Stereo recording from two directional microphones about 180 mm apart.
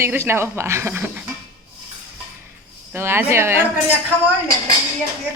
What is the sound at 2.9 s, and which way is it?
Speech, 15° right (ahead or behind).